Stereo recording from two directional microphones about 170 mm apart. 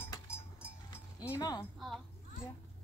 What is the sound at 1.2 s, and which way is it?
Chink, 20° left (ahead or behind).